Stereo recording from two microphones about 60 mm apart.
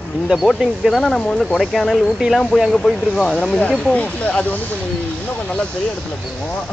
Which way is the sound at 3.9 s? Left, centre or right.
Left.